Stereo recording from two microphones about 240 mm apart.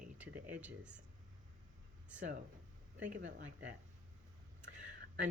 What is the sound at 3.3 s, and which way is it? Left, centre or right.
Speech, right.